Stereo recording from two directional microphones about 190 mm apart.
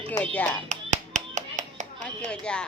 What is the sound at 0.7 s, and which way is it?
Clapping, 40° right (ahead or behind).